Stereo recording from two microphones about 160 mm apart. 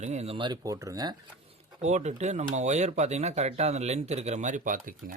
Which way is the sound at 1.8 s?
45° right (ahead or behind).